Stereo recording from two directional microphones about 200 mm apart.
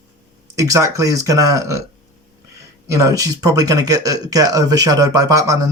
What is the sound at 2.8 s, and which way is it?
Speech, 15° right (ahead or behind).